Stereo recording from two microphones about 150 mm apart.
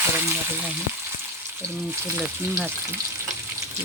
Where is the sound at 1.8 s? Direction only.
15° right (ahead or behind).